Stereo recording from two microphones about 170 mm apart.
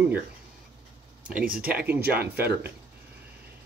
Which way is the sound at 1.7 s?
10° right (ahead or behind).